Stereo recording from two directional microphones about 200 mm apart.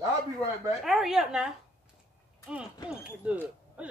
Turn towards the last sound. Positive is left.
turn(degrees=-5)  # may be behind; listen again after turning